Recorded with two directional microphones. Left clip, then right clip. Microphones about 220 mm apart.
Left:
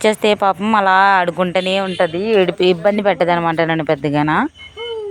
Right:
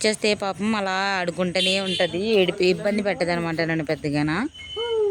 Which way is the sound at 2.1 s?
35° left (ahead or behind).